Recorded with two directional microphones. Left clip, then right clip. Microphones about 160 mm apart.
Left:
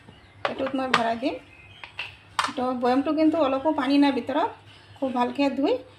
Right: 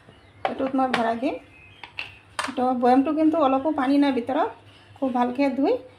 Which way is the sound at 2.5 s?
20° right (ahead or behind).